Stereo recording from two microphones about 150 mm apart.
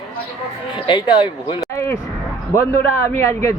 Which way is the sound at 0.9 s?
30° left (ahead or behind).